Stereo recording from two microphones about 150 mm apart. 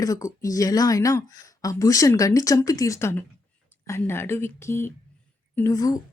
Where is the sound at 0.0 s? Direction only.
25° left (ahead or behind).